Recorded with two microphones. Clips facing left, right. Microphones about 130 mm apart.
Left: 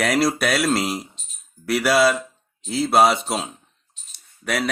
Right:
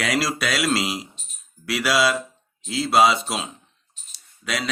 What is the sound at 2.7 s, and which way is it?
Speech, 55° left (ahead or behind).